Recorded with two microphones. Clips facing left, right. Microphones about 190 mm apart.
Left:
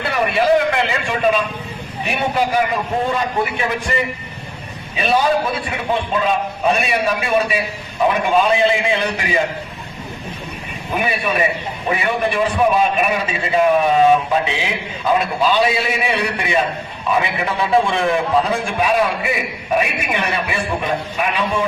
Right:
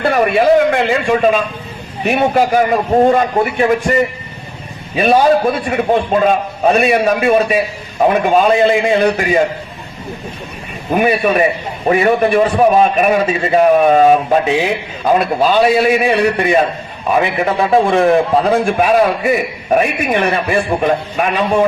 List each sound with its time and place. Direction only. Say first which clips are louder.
0.0 s a man's voice: right 6 dB; 50° right (ahead or behind)
10.9 s a man's voice: right 7 dB; 45° right (ahead or behind)